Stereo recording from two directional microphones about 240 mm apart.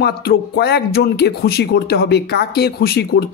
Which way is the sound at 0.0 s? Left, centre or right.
Left.